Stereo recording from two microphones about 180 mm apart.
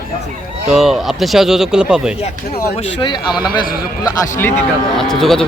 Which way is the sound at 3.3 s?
25° left (ahead or behind).